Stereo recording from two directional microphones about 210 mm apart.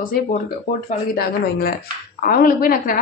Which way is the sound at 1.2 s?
45° left (ahead or behind).